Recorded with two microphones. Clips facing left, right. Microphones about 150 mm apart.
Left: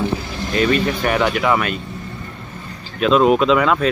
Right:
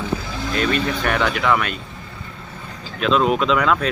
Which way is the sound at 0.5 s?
5° left (ahead or behind).